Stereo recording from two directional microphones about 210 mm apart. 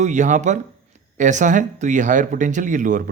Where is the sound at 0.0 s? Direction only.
35° right (ahead or behind).